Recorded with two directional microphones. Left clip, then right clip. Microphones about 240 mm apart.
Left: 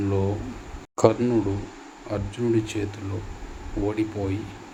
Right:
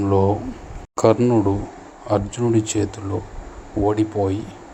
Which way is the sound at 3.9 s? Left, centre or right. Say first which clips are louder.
Right 8 dB; right.